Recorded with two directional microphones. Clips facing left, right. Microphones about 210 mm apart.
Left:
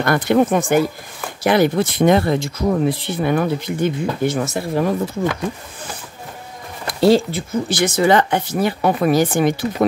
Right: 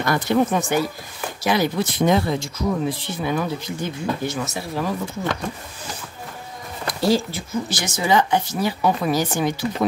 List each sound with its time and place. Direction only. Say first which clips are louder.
0.0 s speech: left 4 dB; 60° left (ahead or behind)
7.0 s speech: left 6 dB; 60° left (ahead or behind)